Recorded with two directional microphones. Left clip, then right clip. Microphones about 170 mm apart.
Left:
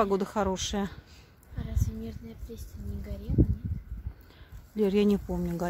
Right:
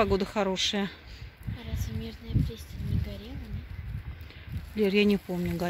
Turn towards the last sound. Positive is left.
turn(degrees=5)  # may be behind; listen again after turning